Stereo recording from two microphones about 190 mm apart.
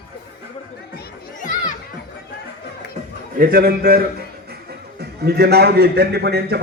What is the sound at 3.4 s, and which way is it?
Speech, 55° right (ahead or behind).